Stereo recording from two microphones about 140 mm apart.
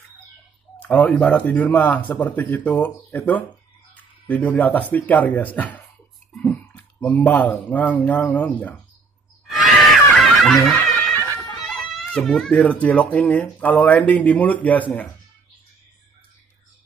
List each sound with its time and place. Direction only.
0.8 s speech: 10° left (ahead or behind)
6.3 s a sound: 10° left (ahead or behind)
7.6 s speech: 10° left (ahead or behind)
9.5 s a sound: centre (ahead or behind)
10.4 s music: centre (ahead or behind)
11.5 s speech: centre (ahead or behind)